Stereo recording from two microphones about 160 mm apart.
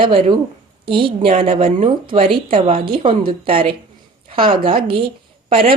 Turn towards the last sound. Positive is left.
turn(degrees=-35)  # may be behind; listen again after turning